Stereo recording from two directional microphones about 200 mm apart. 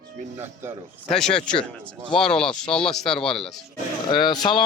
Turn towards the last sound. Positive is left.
turn(degrees=20)  # may be behind; listen again after turning